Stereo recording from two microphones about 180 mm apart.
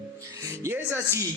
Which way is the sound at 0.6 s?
15° right (ahead or behind).